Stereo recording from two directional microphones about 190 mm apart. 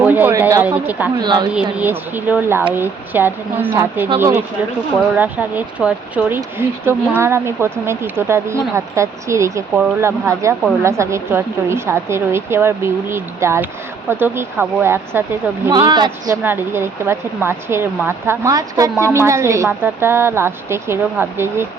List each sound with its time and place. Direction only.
0.0 s speech: 10° right (ahead or behind)
1.2 s speech: 25° right (ahead or behind)
1.8 s speech: 10° right (ahead or behind)
15.7 s speech: 20° right (ahead or behind)
16.3 s speech: 10° right (ahead or behind)